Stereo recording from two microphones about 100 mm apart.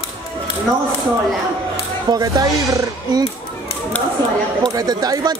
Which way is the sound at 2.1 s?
40° right (ahead or behind).